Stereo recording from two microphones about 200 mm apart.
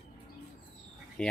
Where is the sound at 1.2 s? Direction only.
5° left (ahead or behind).